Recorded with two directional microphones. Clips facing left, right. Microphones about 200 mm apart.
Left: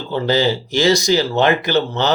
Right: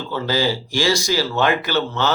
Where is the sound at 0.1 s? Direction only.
20° left (ahead or behind).